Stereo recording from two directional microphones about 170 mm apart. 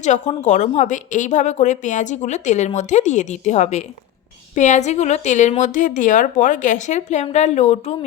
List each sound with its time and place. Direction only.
0.0 s a woman's voice: 45° left (ahead or behind)